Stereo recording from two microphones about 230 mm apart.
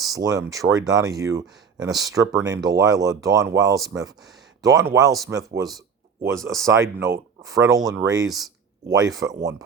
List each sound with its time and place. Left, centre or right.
0.1 s speech: centre